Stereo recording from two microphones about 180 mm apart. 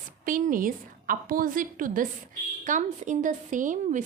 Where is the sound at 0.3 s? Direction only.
50° right (ahead or behind).